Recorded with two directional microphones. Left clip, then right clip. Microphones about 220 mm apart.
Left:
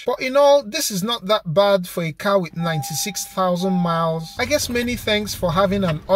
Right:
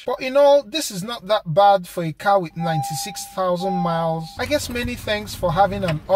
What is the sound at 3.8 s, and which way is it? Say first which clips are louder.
Speech: left 1 dB; 30° left (ahead or behind).